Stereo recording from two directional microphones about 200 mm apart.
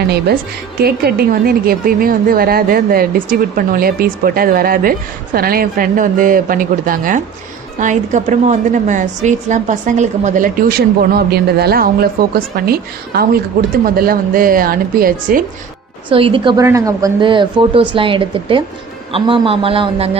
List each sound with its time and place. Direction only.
0.8 s a woman's voice: 50° right (ahead or behind)
16.0 s speech: 25° right (ahead or behind)